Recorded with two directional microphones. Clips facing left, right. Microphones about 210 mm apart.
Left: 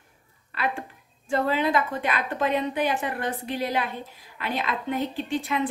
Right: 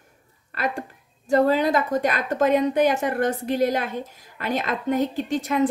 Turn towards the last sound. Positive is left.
turn(degrees=-45)  # may be behind; listen again after turning